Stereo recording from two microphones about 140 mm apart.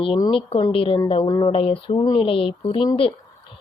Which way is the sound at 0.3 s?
40° left (ahead or behind).